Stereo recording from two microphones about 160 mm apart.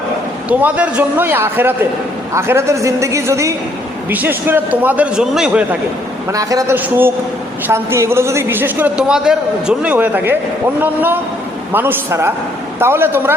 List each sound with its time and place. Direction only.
0.4 s a man's voice: 10° right (ahead or behind)
6.3 s a woman's voice: 20° right (ahead or behind)